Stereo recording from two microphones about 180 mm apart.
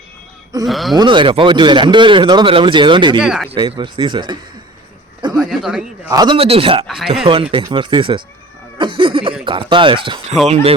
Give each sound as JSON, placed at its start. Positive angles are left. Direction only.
{"t": 0.6, "sound": "speech", "side_deg": 0}
{"t": 0.9, "sound": "a man's voice", "side_deg": -25}
{"t": 3.2, "sound": "speech", "side_deg": 0}
{"t": 3.5, "sound": "a man's voice", "side_deg": -30}
{"t": 5.4, "sound": "speech", "side_deg": -5}
{"t": 6.1, "sound": "speech", "side_deg": -25}
{"t": 6.8, "sound": "speech", "side_deg": 0}
{"t": 7.1, "sound": "a man's voice", "side_deg": -30}